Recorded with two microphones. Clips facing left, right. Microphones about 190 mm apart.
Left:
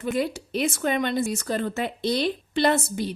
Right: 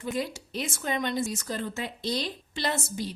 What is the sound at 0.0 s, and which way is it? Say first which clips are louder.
Speech: left 6 dB; 60° left (ahead or behind).